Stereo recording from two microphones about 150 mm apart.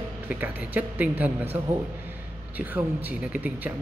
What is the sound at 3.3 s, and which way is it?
Speech, 10° right (ahead or behind).